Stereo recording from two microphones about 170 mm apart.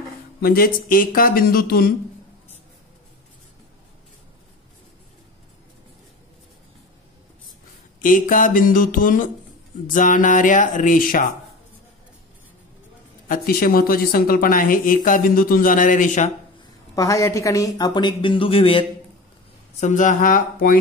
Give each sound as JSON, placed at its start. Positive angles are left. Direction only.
{"t": 0.4, "sound": "speech", "side_deg": 60}
{"t": 8.0, "sound": "speech", "side_deg": 55}
{"t": 13.3, "sound": "speech", "side_deg": 60}
{"t": 16.9, "sound": "speech", "side_deg": 20}
{"t": 19.8, "sound": "speech", "side_deg": 45}